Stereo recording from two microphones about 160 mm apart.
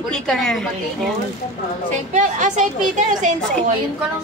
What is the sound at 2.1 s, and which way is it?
A woman's voice, 50° right (ahead or behind).